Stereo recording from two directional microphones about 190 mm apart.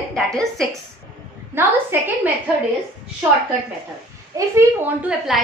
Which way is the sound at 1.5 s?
10° right (ahead or behind).